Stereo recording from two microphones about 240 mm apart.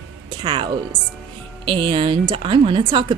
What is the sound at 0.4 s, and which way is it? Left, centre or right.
A woman's voice, centre.